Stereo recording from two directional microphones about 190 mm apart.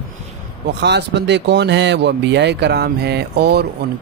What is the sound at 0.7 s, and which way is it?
Speech, 65° right (ahead or behind).